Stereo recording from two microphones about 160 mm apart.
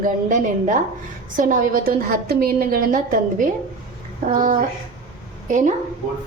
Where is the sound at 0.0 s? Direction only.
55° right (ahead or behind).